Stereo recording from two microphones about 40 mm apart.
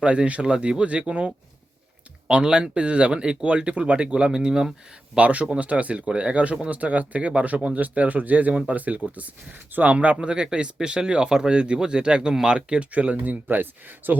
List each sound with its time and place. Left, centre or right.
0.0 s speech: right
0.4 s speech: centre
2.2 s speech: right
5.1 s speech: right
10.2 s speech: right
12.3 s speech: centre
12.5 s speech: right
12.9 s speech: right
13.3 s speech: right